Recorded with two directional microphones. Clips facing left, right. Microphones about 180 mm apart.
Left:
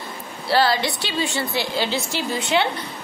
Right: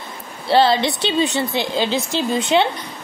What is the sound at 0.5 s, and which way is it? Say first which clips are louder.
A woman's voice: right 4 dB; 25° right (ahead or behind).